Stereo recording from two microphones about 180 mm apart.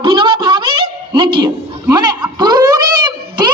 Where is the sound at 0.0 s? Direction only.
30° right (ahead or behind).